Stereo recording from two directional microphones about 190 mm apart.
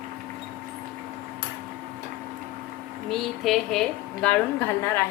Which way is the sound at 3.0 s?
Centre (ahead or behind).